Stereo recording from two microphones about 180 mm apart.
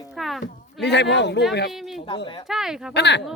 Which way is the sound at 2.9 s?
75° left (ahead or behind).